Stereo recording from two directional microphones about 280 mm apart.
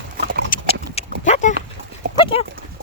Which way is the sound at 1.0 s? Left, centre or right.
Left.